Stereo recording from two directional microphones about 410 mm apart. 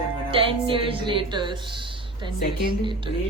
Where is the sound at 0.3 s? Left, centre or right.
Centre.